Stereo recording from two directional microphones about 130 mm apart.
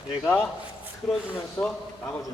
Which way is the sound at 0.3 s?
5° right (ahead or behind).